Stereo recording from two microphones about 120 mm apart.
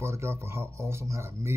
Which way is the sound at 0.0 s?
20° right (ahead or behind).